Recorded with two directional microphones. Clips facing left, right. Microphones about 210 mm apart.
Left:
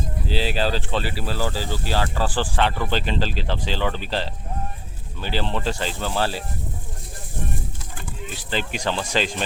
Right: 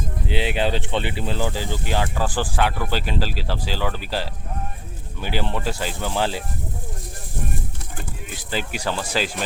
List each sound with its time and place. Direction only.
0.3 s speech: 20° right (ahead or behind)
8.4 s speech: 10° right (ahead or behind)